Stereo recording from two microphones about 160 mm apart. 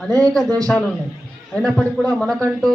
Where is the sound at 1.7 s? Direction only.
10° left (ahead or behind).